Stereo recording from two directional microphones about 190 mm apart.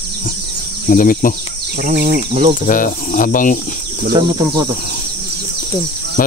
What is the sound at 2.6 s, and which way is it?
Speech, 45° left (ahead or behind).